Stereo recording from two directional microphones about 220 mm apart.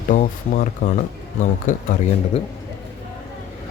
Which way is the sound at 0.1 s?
40° left (ahead or behind).